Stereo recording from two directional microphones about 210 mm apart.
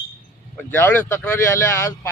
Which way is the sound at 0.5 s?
10° left (ahead or behind).